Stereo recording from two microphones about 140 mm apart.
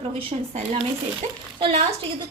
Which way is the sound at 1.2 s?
45° right (ahead or behind).